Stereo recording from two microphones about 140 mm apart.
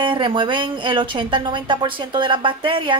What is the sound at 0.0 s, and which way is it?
Speech, 35° right (ahead or behind).